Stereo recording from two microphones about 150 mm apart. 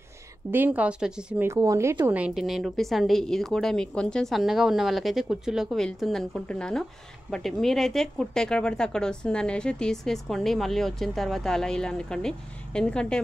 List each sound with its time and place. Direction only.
0.5 s speech: 10° right (ahead or behind)
1.5 s speech: 20° right (ahead or behind)
2.0 s a woman's voice: 10° right (ahead or behind)